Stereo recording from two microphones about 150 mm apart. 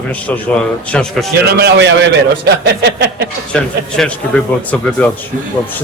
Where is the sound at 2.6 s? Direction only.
90° right.